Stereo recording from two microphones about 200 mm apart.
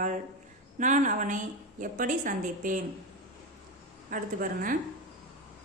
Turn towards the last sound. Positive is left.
turn(degrees=-45)  # may be behind; listen again after turning